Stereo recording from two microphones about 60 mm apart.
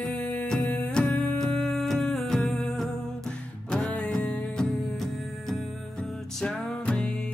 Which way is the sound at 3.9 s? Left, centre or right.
Centre.